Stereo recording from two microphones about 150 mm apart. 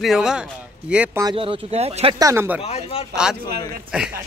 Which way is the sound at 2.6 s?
40° left (ahead or behind).